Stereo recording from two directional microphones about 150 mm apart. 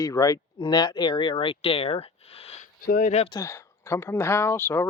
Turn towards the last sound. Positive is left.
turn(degrees=15)  # may be behind; listen again after turning